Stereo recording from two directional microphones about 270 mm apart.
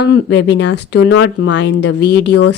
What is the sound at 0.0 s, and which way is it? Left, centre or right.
Speech, left.